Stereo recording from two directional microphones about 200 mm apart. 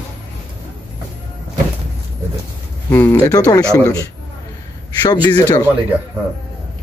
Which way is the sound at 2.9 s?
15° left (ahead or behind).